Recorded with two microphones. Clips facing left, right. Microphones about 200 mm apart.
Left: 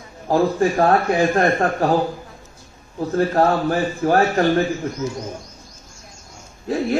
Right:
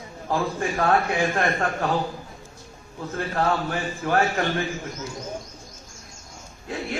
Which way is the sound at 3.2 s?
40° left (ahead or behind).